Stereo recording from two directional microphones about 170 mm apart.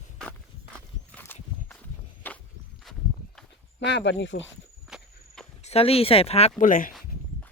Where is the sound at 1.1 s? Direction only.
10° left (ahead or behind).